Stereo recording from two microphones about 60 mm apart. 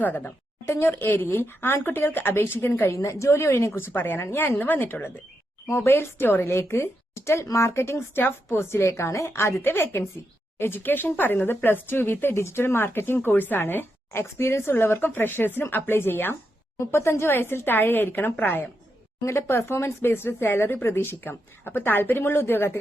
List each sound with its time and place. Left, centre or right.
0.0 s a woman's voice: left
2.9 s a woman's voice: left
3.8 s speech: left
5.6 s a woman's voice: left
16.3 s speech: left
19.2 s speech: left